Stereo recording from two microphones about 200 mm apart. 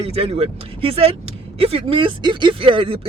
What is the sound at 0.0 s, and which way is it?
Speech, 30° right (ahead or behind).